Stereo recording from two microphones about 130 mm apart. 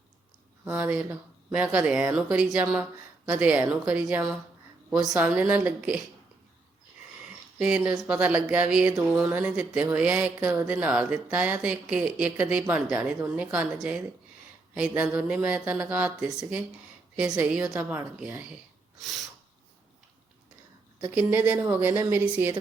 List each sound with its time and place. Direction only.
0.6 s speech: 10° right (ahead or behind)
7.6 s speech: 10° right (ahead or behind)
18.9 s snort: centre (ahead or behind)
21.0 s speech: 15° right (ahead or behind)